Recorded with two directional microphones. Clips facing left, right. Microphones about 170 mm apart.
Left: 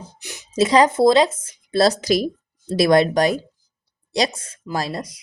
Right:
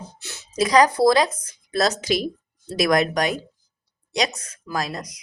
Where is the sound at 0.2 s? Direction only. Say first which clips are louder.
Left 3 dB; 15° left (ahead or behind).